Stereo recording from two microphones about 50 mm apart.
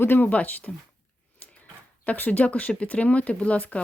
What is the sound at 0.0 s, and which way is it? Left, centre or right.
Speech, left.